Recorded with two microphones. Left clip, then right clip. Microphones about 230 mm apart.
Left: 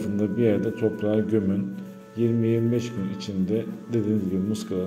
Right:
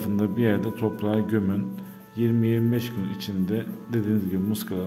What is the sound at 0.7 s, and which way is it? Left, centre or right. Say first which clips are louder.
Speech: left 2 dB; right.